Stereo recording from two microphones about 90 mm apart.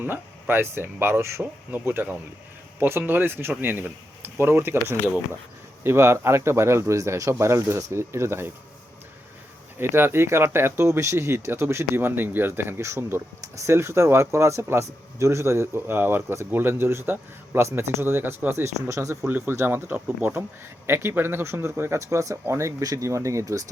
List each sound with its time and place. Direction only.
0.0 s a man's voice: 20° right (ahead or behind)
9.7 s a man's voice: 25° right (ahead or behind)
19.3 s a man's voice: 25° right (ahead or behind)